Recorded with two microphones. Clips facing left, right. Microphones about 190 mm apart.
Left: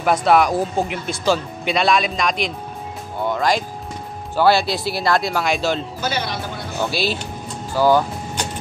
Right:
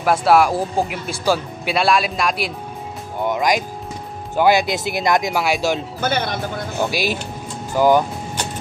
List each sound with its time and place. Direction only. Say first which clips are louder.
0.0 s speech: right 1 dB; 5° right (ahead or behind)
3.3 s music: right 1 dB; 15° right (ahead or behind)
4.4 s speech: right 1 dB; 15° right (ahead or behind)
5.9 s speech: right 3 dB; 55° right (ahead or behind)
6.8 s speech: right 1 dB; 15° right (ahead or behind)